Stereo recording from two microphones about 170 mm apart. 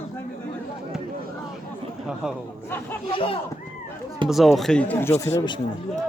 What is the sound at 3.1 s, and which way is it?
Speech, 30° left (ahead or behind).